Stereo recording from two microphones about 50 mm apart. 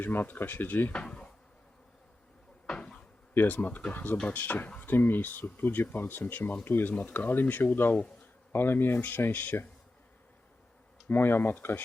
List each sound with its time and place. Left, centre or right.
0.0 s speech: left
1.0 s insect: centre
2.6 s cupboard open or close: centre
3.3 s speech: left
6.9 s speech: left
8.5 s speech: left
9.0 s speech: left
11.1 s speech: left